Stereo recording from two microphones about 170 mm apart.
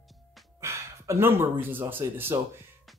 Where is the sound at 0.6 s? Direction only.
15° right (ahead or behind).